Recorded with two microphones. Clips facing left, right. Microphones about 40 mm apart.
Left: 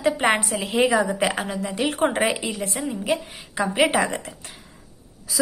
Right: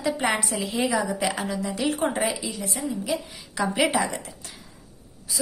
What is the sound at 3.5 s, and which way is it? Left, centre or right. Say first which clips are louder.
Speech: left 3 dB; left.